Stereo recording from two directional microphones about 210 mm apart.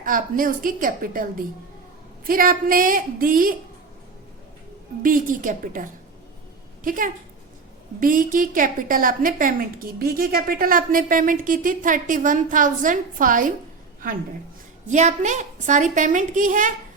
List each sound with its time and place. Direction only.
0.0 s a woman's voice: 40° right (ahead or behind)
5.0 s a woman's voice: 40° right (ahead or behind)
14.8 s a woman's voice: 35° right (ahead or behind)